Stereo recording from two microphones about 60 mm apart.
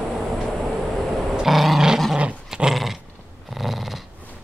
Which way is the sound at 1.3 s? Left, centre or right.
Centre.